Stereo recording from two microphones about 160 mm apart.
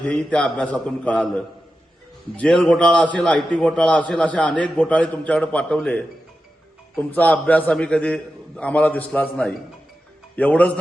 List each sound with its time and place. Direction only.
0.0 s a man's voice: 5° left (ahead or behind)